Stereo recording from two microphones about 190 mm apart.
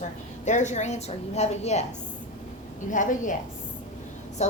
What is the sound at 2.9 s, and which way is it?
Speech, 45° left (ahead or behind).